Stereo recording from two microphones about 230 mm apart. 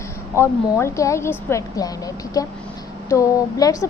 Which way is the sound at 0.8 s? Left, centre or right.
Centre.